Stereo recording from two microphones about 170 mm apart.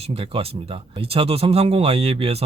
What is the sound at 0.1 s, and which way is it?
Speech, 35° right (ahead or behind).